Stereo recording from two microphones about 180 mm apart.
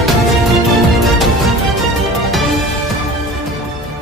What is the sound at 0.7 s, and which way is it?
Music, centre (ahead or behind).